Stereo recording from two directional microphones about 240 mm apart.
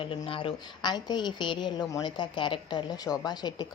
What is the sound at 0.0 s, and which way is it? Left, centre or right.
A woman's voice, left.